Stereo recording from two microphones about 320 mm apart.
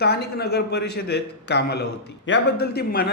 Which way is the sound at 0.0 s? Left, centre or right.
Left.